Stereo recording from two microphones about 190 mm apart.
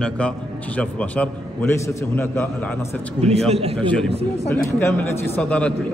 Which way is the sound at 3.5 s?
30° right (ahead or behind).